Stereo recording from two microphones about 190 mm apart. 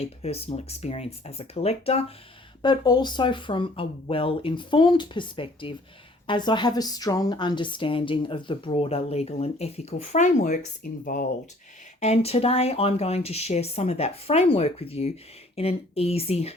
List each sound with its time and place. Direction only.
0.0 s a woman's voice: 30° left (ahead or behind)
11.9 s speech: 35° left (ahead or behind)